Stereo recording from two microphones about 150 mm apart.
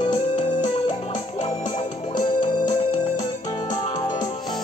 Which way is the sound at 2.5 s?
30° left (ahead or behind).